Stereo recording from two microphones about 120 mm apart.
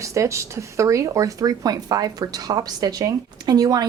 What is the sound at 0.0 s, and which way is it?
Speech, 25° right (ahead or behind).